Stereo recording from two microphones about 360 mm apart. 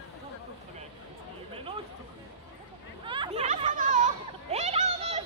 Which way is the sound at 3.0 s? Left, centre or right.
Centre.